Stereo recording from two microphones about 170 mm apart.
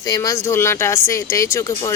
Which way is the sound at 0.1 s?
20° left (ahead or behind).